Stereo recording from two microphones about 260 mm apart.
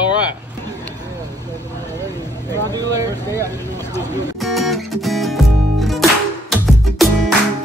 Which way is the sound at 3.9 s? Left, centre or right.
Centre.